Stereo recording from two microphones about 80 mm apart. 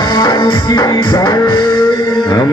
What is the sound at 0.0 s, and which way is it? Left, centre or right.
Music, left.